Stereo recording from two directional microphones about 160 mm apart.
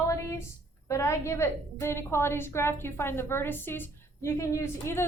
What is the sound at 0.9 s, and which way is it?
A woman's voice, 15° left (ahead or behind).